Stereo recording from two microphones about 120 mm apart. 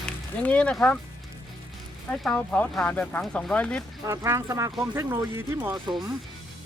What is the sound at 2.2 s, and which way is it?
Speech, 10° left (ahead or behind).